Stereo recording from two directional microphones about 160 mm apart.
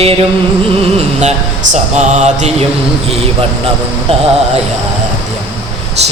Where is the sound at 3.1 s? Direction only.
35° right (ahead or behind).